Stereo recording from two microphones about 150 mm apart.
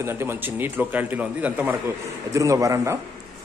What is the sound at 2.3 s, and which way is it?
Speech, 20° right (ahead or behind).